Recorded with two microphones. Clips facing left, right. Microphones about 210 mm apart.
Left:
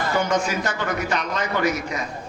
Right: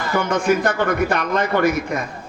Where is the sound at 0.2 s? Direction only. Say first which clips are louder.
Right 6 dB; 55° right (ahead or behind).